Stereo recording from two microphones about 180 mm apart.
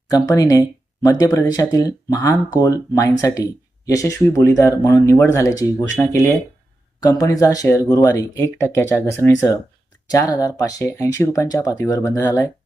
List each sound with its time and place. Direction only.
0.1 s speech: 20° left (ahead or behind)